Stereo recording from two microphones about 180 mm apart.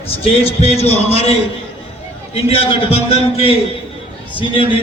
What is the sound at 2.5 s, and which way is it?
A man's voice, 30° left (ahead or behind).